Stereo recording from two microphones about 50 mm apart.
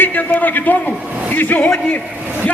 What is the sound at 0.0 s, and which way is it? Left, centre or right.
A man's voice, left.